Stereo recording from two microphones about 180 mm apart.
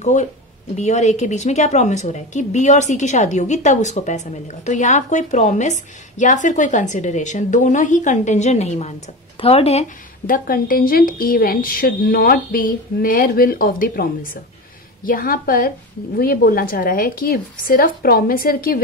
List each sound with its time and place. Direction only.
0.0 s a woman's voice: 40° left (ahead or behind)
10.2 s a woman's voice: 55° left (ahead or behind)